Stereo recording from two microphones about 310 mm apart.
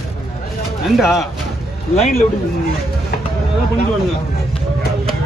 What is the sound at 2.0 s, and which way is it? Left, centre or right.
Speech, centre.